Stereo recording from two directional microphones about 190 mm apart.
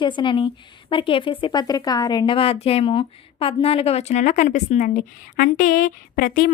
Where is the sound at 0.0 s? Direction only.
25° left (ahead or behind).